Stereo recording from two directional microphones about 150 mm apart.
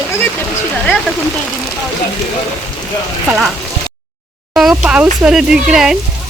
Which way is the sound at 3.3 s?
Centre (ahead or behind).